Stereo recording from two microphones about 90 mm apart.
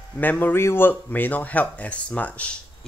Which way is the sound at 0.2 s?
20° left (ahead or behind).